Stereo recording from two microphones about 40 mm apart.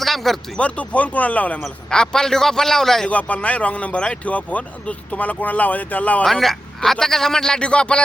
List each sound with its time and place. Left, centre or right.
0.0 s a sound: centre
0.6 s speech: left
1.9 s a man's voice: centre
3.1 s speech: left
6.2 s a man's voice: centre; by 8.0 s left